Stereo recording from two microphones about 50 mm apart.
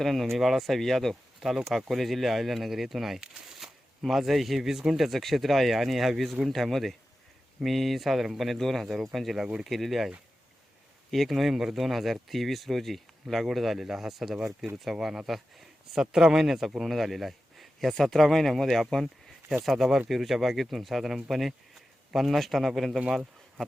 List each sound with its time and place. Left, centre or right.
0.0 s speech: centre
9.4 s speech: centre
9.6 s speech: centre
11.1 s speech: centre